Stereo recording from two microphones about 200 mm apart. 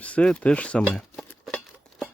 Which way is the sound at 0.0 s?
5° left (ahead or behind).